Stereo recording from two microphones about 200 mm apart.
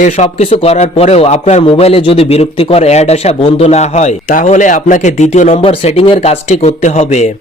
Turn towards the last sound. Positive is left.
turn(degrees=35)  # may be behind; listen again after turning